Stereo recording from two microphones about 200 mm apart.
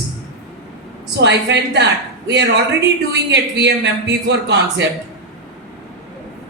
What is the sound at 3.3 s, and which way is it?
A man's voice, 55° right (ahead or behind).